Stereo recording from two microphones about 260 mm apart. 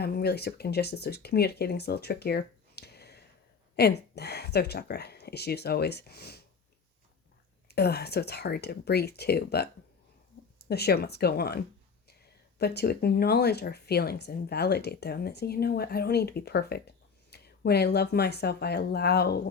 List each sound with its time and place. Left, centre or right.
0.0 s speech: left
7.7 s speech: left